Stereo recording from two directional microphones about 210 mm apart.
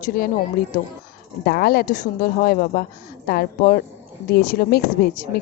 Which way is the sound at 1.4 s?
45° left (ahead or behind).